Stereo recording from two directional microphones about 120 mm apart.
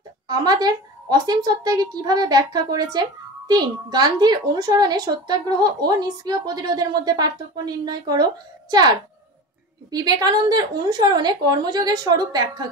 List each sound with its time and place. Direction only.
0.3 s a woman's voice: 35° right (ahead or behind)